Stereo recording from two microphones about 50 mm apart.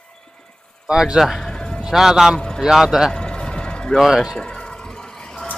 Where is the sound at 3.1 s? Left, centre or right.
Centre.